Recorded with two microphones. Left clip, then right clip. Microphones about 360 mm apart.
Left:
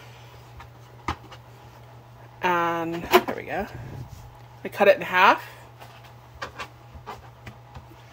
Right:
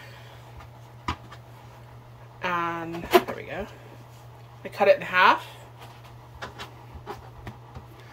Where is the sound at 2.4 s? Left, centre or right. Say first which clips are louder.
Left 4 dB; centre.